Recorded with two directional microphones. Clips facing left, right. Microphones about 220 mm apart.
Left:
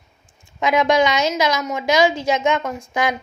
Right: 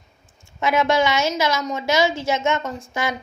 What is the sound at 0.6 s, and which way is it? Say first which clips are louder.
A woman's voice: left 2 dB; 15° left (ahead or behind).